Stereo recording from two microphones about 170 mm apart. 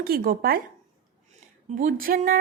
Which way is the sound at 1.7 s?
50° right (ahead or behind).